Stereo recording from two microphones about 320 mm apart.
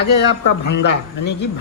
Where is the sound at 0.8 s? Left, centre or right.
Left.